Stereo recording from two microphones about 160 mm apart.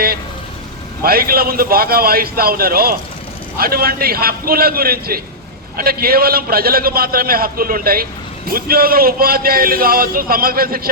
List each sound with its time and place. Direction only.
1.0 s a man's voice: 70° right (ahead or behind)